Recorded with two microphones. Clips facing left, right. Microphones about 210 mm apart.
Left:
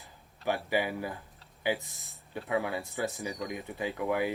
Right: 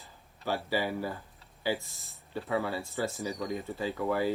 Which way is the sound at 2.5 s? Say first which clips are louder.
Even; 15° left (ahead or behind).